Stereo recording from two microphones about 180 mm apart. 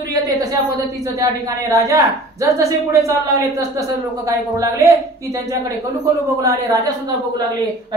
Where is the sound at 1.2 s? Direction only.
15° right (ahead or behind).